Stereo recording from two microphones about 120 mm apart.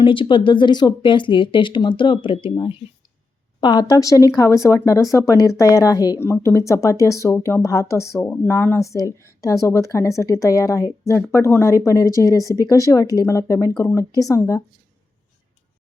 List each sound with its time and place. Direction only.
0.0 s speech: 45° left (ahead or behind); by 14.6 s 25° left (ahead or behind)